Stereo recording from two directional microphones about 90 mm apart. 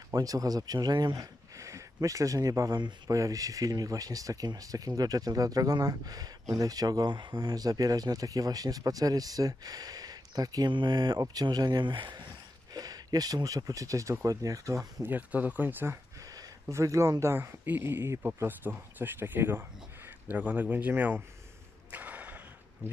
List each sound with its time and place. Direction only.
0.1 s speech: 40° right (ahead or behind)
10.7 s speech: 55° right (ahead or behind)
12.7 s speech: 45° right (ahead or behind)
14.8 s speech: 20° right (ahead or behind)
16.2 s a sound: 40° right (ahead or behind)
16.7 s a man's voice: 35° right (ahead or behind)
21.9 s a sound: 20° right (ahead or behind)